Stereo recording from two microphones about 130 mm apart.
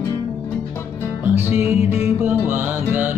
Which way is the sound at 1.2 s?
15° right (ahead or behind).